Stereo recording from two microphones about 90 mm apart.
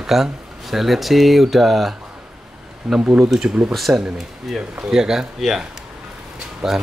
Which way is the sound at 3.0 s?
20° right (ahead or behind).